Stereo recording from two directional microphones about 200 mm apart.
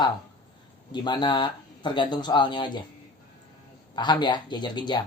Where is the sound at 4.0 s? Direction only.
20° left (ahead or behind).